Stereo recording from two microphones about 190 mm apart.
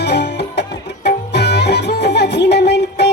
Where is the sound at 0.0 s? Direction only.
60° left (ahead or behind).